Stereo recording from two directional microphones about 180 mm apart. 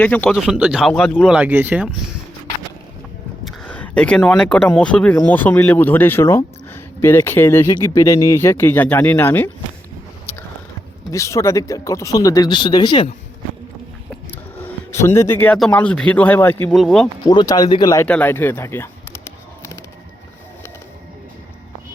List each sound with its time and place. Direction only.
0.0 s speech: 5° left (ahead or behind); by 1.9 s 10° right (ahead or behind)
3.4 s speech: 5° left (ahead or behind)
11.1 s speech: 15° left (ahead or behind)
14.1 s speech: 10° left (ahead or behind)
17.2 s speech: 20° left (ahead or behind)
18.1 s a sound: 10° left (ahead or behind)